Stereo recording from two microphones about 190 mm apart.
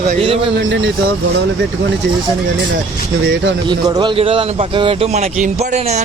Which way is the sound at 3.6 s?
25° right (ahead or behind).